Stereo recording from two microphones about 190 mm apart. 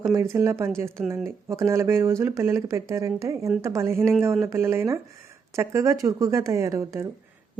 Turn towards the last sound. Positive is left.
turn(degrees=-15)  # may be behind; listen again after turning